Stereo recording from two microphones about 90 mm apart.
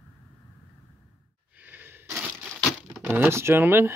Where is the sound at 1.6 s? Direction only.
20° right (ahead or behind).